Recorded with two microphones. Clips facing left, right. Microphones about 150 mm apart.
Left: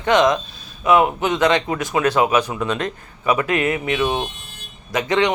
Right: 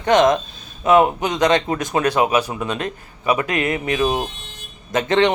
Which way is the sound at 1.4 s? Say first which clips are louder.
Right 2 dB; 40° right (ahead or behind).